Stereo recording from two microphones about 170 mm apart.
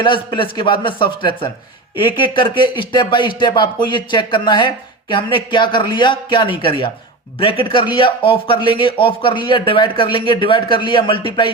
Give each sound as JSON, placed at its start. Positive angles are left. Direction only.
{"t": 0.0, "sound": "speech", "side_deg": 30}